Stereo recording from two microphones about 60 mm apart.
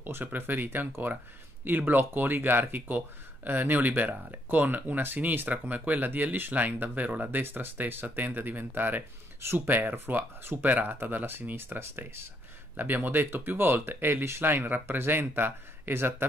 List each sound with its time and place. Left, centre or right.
0.0 s speech: right